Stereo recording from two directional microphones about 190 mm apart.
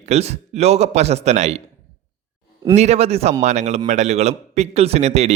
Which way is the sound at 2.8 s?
35° right (ahead or behind).